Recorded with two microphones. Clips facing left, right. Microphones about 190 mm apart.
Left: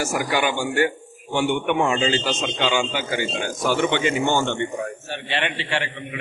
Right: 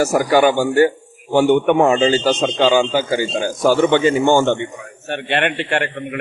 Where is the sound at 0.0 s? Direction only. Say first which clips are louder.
Right 9 dB; 40° right (ahead or behind).